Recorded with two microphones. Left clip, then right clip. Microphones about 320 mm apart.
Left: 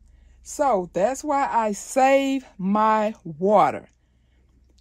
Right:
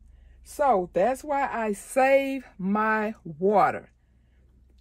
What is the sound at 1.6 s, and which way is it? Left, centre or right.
Speech, left.